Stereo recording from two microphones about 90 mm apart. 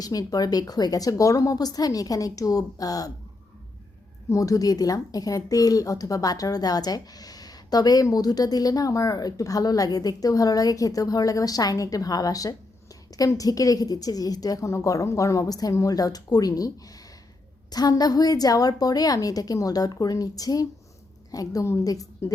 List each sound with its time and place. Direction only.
0.0 s speech: 45° left (ahead or behind)
4.3 s a woman's voice: 40° left (ahead or behind)